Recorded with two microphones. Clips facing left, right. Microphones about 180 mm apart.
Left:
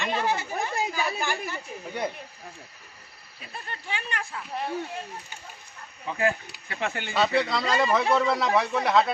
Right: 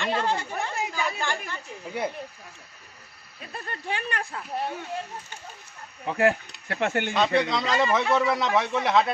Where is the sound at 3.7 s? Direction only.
40° right (ahead or behind).